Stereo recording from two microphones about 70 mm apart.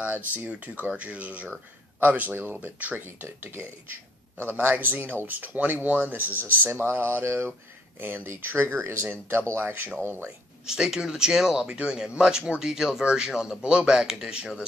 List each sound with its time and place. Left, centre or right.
0.0 s speech: right
10.2 s speech: centre